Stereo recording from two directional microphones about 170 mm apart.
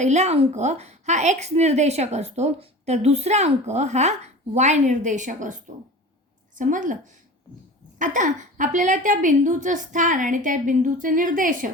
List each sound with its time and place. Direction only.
0.0 s a woman's voice: 40° right (ahead or behind)
6.6 s a woman's voice: 50° right (ahead or behind)